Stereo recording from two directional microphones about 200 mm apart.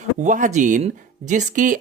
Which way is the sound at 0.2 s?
35° right (ahead or behind).